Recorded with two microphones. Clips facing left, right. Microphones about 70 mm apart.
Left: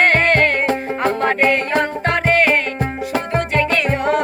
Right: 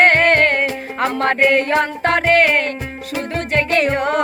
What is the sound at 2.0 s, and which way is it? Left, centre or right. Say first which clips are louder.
Music: right 3 dB; right.